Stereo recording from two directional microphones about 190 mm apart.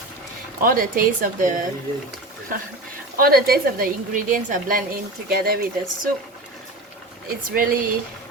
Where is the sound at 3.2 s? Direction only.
50° right (ahead or behind).